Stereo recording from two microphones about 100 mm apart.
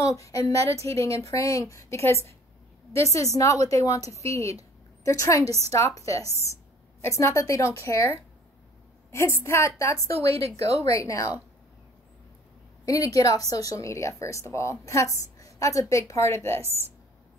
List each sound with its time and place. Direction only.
0.0 s a woman's voice: 35° left (ahead or behind)
12.8 s a woman's voice: 35° left (ahead or behind)